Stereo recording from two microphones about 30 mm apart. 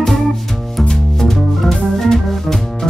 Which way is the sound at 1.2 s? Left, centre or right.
Centre.